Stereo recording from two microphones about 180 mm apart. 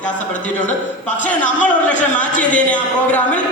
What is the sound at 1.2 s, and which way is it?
A man's voice, 10° left (ahead or behind).